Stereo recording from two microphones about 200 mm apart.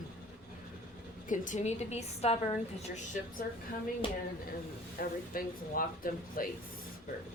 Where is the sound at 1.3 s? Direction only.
40° left (ahead or behind).